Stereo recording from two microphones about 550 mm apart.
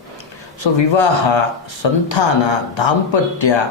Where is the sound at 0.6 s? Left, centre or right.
Left.